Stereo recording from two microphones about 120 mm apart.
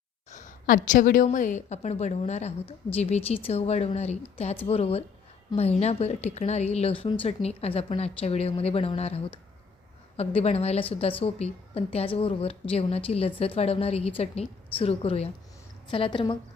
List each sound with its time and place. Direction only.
0.3 s a sound: 90° left
1.2 s a woman's voice: 90° left; by 15.3 s 55° left (ahead or behind)
15.9 s a woman's voice: 45° left (ahead or behind)